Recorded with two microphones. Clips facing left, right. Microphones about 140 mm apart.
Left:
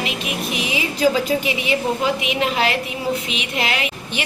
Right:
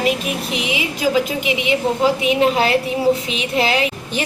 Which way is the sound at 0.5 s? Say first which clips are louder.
Right 1 dB; 20° right (ahead or behind).